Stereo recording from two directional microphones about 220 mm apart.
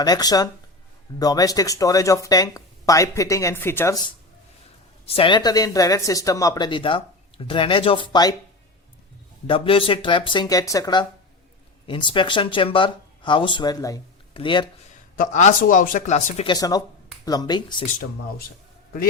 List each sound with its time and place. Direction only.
0.0 s speech: 15° left (ahead or behind)
9.5 s speech: 25° left (ahead or behind)
15.2 s speech: 35° left (ahead or behind)
17.8 s speech: 40° left (ahead or behind)